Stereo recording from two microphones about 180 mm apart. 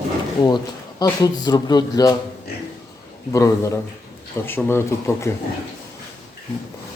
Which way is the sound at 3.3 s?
15° left (ahead or behind).